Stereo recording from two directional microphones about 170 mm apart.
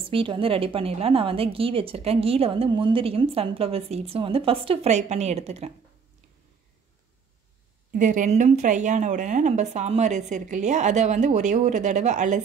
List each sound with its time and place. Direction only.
0.1 s a woman's voice: 30° right (ahead or behind)
7.9 s a woman's voice: 50° right (ahead or behind)